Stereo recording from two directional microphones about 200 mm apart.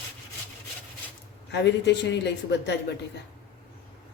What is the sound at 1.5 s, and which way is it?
Speech, 60° left (ahead or behind).